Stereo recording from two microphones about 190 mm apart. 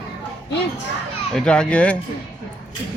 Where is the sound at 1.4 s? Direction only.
5° left (ahead or behind).